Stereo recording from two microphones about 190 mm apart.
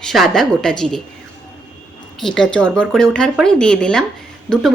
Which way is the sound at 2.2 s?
5° left (ahead or behind).